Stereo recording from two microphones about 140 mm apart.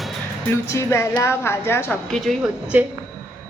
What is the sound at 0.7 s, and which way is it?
A woman's voice, 20° left (ahead or behind).